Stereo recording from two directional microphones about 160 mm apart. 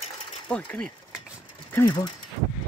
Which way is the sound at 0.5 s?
10° left (ahead or behind).